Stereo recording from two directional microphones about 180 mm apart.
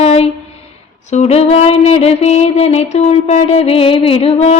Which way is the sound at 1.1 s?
35° left (ahead or behind).